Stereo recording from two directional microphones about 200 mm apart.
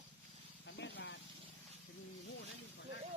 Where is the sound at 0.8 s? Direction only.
60° left (ahead or behind).